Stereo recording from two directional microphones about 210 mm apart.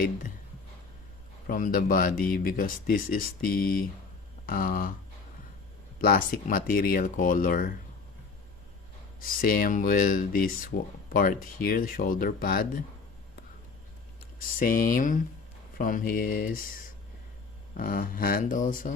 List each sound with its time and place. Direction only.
1.5 s speech: 40° left (ahead or behind)
6.0 s speech: 45° left (ahead or behind)
9.2 s rub: 45° left (ahead or behind)
11.1 s speech: 40° left (ahead or behind)
14.3 s rub: 40° left (ahead or behind)
15.8 s speech: 40° left (ahead or behind)
17.7 s rub: 40° left (ahead or behind)